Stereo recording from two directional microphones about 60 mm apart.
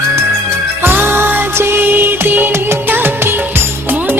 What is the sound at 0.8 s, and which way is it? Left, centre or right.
Music, right.